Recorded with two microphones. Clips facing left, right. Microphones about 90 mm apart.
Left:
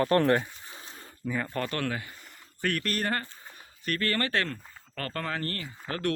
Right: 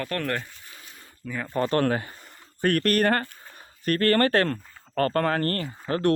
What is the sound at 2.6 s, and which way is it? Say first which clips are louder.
Speech: right 8 dB; 50° right (ahead or behind).